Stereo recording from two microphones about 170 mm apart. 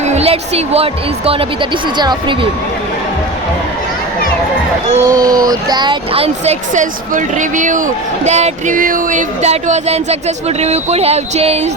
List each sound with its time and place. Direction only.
0.0 s a woman's voice: 40° right (ahead or behind)
4.9 s speech: 20° right (ahead or behind); by 11.7 s 40° right (ahead or behind)